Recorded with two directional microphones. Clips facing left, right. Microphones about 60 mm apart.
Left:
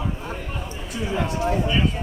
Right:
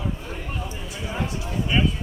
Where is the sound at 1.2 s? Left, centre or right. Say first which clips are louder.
Left 9 dB; left.